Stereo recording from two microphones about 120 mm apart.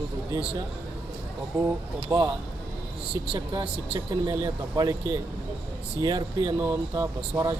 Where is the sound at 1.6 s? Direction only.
25° right (ahead or behind).